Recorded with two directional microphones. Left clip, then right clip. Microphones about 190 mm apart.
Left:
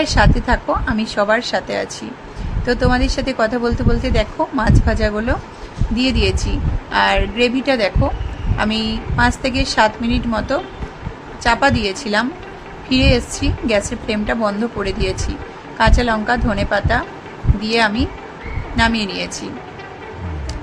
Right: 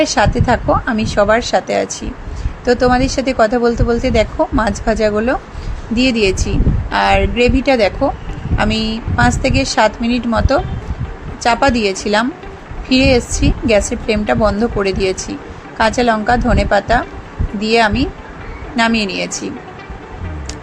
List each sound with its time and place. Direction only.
0.0 s a woman's voice: 15° right (ahead or behind)